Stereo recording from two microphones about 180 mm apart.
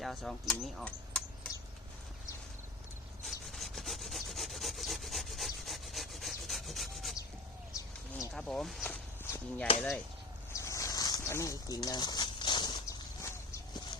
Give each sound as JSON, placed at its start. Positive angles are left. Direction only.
{"t": 0.0, "sound": "speech", "side_deg": 0}
{"t": 3.2, "sound": "sawing", "side_deg": 0}
{"t": 8.3, "sound": "speech", "side_deg": 5}
{"t": 9.2, "sound": "chop", "side_deg": 15}
{"t": 10.5, "sound": "a sound", "side_deg": 15}